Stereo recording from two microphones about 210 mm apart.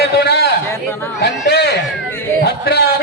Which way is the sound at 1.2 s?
50° left (ahead or behind).